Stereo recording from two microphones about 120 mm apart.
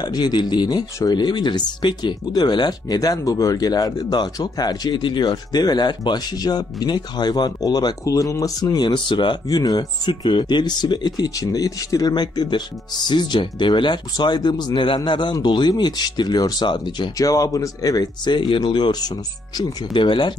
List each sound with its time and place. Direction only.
0.0 s speech: 35° left (ahead or behind)